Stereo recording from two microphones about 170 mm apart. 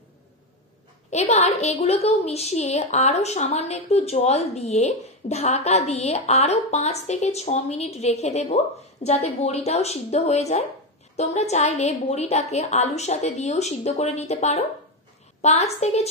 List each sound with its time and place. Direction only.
1.1 s a woman's voice: 40° left (ahead or behind)